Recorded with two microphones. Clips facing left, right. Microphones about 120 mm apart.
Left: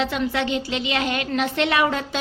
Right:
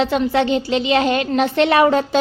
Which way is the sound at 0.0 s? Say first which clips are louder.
Right 6 dB; 30° right (ahead or behind).